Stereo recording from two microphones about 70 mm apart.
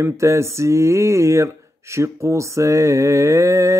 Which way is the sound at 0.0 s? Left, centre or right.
Right.